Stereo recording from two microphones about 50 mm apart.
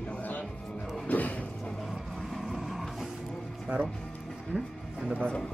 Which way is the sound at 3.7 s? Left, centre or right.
Right.